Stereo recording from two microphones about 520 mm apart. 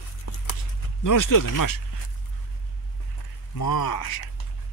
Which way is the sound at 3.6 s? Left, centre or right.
Left.